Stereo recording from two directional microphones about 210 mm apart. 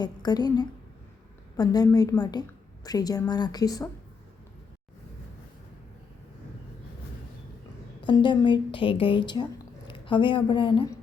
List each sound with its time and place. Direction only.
0.0 s a woman's voice: 20° left (ahead or behind)
8.0 s a woman's voice: 20° left (ahead or behind)